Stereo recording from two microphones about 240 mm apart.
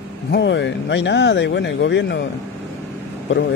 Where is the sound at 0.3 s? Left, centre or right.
Left.